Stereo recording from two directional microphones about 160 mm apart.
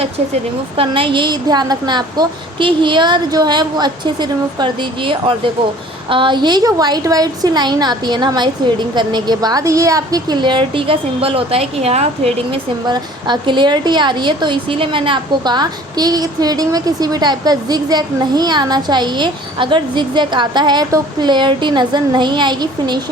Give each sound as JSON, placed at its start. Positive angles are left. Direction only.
{"t": 0.8, "sound": "a woman's voice", "side_deg": -35}
{"t": 12.9, "sound": "a woman's voice", "side_deg": -30}